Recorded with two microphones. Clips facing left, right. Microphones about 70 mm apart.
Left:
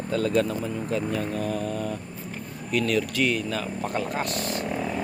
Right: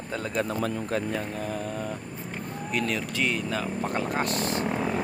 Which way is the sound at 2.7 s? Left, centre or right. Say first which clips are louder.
Left 5 dB; right.